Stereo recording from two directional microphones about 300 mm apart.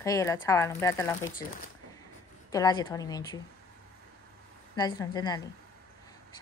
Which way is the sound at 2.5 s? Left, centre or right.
Centre.